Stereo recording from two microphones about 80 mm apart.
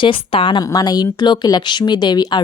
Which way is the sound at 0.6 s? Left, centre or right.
Left.